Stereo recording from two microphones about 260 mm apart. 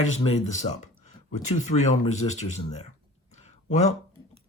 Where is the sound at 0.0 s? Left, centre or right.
Left.